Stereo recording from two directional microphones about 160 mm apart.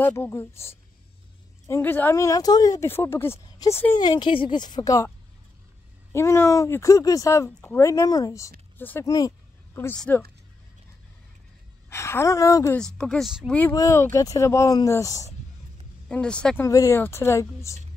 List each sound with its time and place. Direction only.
0.0 s speech: 15° left (ahead or behind)
1.7 s speech: 10° left (ahead or behind)
6.1 s speech: 15° left (ahead or behind)
11.9 s speech: 15° left (ahead or behind)
12.7 s speech: 5° left (ahead or behind)
13.5 s speech: 10° left (ahead or behind)
16.1 s speech: 5° left (ahead or behind)
16.6 s speech: 20° left (ahead or behind)